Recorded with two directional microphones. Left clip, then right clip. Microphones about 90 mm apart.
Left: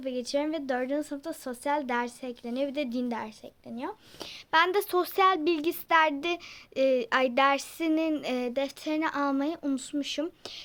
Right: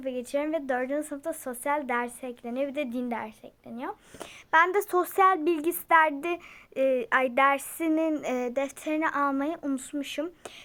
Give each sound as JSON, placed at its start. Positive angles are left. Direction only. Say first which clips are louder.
{"t": 0.0, "sound": "speech", "louder": "even", "side_deg": 40}
{"t": 5.0, "sound": "speech", "louder": "right 2 dB", "side_deg": 30}
{"t": 6.7, "sound": "speech", "louder": "even", "side_deg": 55}